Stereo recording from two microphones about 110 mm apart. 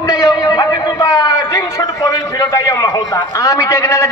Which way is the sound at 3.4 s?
30° left (ahead or behind).